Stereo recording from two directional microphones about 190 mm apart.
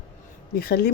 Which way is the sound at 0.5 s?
50° left (ahead or behind).